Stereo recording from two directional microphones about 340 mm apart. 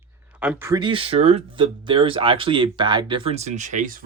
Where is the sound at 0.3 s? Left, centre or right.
Centre.